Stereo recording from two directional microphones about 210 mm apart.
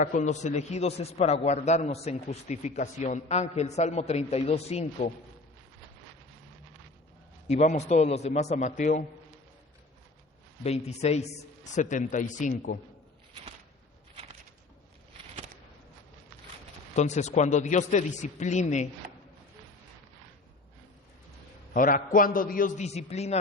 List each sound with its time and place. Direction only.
0.0 s a man's voice: 35° left (ahead or behind)
7.4 s a man's voice: 35° left (ahead or behind)
10.6 s a man's voice: 30° left (ahead or behind)
16.9 s a man's voice: 35° left (ahead or behind)
21.7 s a man's voice: 40° left (ahead or behind)